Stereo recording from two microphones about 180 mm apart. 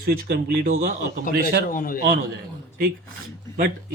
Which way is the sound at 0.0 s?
55° right (ahead or behind).